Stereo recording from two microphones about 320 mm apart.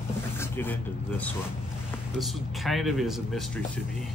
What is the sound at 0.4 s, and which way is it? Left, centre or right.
Speech, centre.